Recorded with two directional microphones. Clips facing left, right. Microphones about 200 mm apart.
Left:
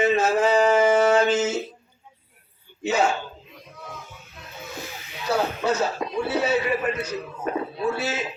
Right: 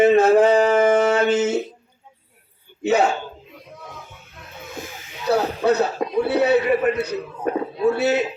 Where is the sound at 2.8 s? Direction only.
60° right (ahead or behind).